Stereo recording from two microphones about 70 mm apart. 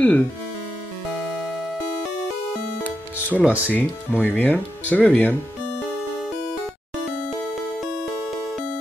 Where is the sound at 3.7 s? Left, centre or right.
Left.